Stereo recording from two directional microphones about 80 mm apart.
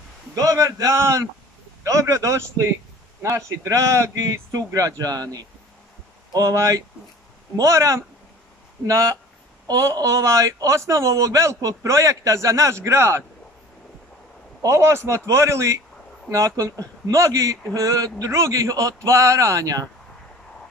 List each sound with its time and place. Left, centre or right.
0.4 s a man's voice: right
6.4 s a man's voice: right
14.6 s a man's voice: right